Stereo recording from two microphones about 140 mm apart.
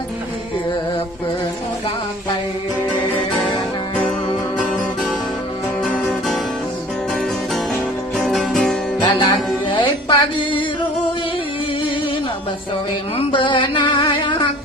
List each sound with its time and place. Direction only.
4.5 s music: centre (ahead or behind)
9.0 s music: 35° left (ahead or behind)
13.1 s a sound: 35° left (ahead or behind)